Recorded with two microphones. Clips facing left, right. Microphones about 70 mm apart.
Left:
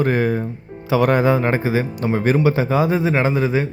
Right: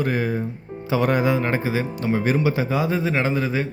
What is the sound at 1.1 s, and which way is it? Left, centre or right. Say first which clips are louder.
Speech: left 4 dB; left.